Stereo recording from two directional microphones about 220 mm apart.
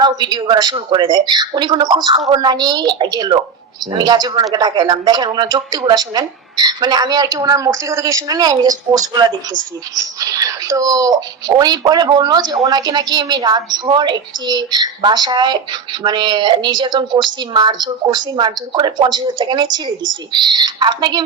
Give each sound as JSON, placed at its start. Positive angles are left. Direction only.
{"t": 0.0, "sound": "a woman's voice", "side_deg": -20}